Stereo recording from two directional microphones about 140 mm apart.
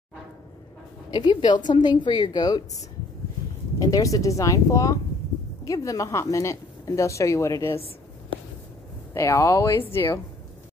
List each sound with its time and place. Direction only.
1.1 s a woman's voice: 30° left (ahead or behind)
3.8 s speech: 25° left (ahead or behind)
9.1 s speech: 20° left (ahead or behind)